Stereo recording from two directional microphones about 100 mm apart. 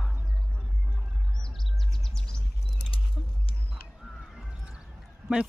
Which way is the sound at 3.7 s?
5° right (ahead or behind).